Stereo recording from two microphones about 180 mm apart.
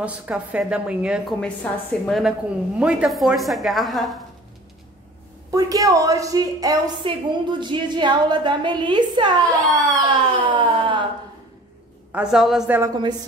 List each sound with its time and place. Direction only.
0.0 s a woman's voice: 5° right (ahead or behind)
5.5 s a woman's voice: 20° right (ahead or behind)
10.0 s wail: 25° right (ahead or behind)
12.1 s a woman's voice: 5° right (ahead or behind)
12.9 s a woman's voice: 25° right (ahead or behind)